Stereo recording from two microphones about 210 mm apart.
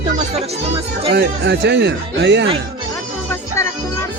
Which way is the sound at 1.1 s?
55° right (ahead or behind).